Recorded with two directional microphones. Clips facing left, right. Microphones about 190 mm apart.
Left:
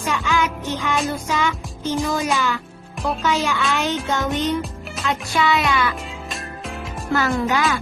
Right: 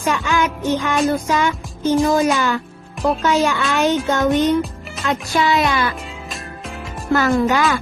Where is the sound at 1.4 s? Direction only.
50° right (ahead or behind).